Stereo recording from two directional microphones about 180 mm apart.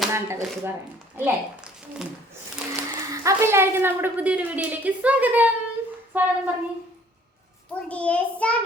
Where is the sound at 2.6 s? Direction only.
5° right (ahead or behind).